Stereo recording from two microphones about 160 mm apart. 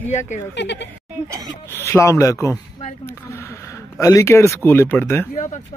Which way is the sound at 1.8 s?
15° left (ahead or behind).